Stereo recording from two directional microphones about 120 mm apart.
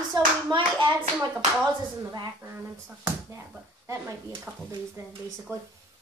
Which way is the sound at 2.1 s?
25° right (ahead or behind).